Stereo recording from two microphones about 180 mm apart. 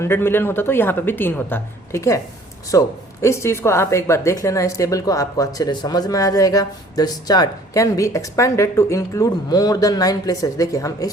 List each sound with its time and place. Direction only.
0.0 s speech: 15° left (ahead or behind)